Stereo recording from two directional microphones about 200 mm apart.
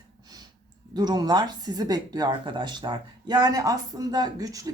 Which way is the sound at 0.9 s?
20° right (ahead or behind).